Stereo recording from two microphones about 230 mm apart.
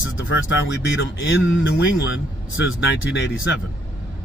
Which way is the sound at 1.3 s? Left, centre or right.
Left.